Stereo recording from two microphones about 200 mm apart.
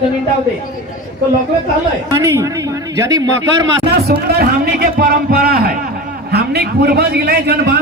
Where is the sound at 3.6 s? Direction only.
55° right (ahead or behind).